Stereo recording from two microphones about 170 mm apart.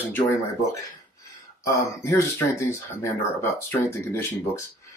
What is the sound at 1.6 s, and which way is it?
Speech, 15° left (ahead or behind).